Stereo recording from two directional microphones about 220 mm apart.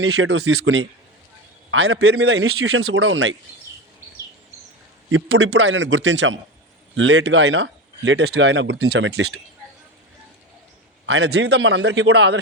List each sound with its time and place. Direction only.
0.0 s speech: 70° right (ahead or behind)
2.2 s speech: 60° right (ahead or behind)
5.0 s speech: 65° right (ahead or behind); by 9.0 s 50° right (ahead or behind)
9.0 s speech: 70° right (ahead or behind)
11.0 s a man's voice: 55° right (ahead or behind)